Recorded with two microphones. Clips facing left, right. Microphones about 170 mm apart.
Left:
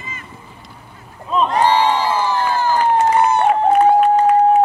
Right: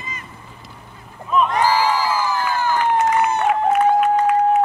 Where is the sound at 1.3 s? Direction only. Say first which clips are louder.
Left 2 dB; 30° left (ahead or behind).